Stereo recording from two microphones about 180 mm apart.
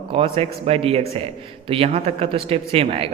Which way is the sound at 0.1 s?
30° right (ahead or behind).